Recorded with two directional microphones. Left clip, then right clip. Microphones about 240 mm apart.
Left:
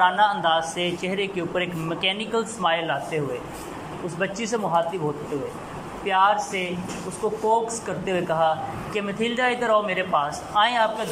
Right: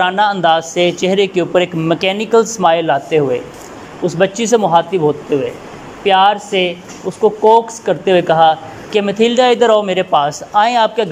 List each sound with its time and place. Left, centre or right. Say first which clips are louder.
0.0 s a woman's voice: right 7 dB; right